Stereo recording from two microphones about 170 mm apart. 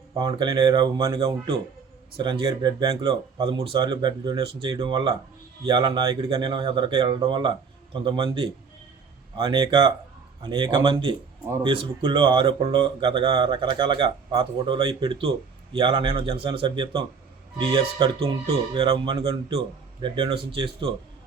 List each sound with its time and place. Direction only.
0.1 s speech: 25° right (ahead or behind)